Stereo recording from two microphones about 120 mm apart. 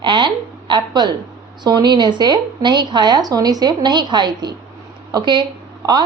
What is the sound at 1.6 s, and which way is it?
A woman's voice, 35° right (ahead or behind).